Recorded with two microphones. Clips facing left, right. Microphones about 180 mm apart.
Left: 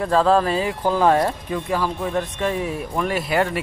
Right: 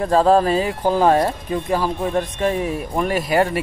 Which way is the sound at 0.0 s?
40° right (ahead or behind).